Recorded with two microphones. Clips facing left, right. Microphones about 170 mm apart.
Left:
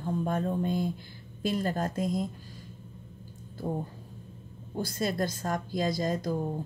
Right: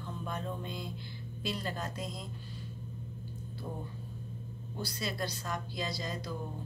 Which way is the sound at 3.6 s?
40° left (ahead or behind).